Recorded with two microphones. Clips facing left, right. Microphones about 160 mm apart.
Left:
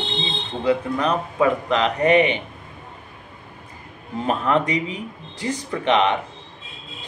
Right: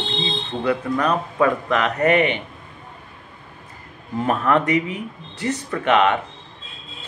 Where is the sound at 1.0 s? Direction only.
25° left (ahead or behind).